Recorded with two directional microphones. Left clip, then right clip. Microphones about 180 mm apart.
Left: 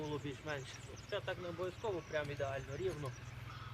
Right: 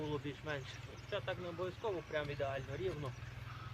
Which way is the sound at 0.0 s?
25° left (ahead or behind).